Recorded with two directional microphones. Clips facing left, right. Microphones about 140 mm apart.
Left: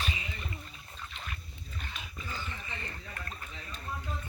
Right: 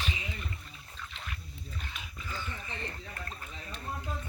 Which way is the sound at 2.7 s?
30° right (ahead or behind).